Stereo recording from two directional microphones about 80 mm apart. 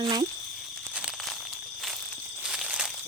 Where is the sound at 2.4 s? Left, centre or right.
Centre.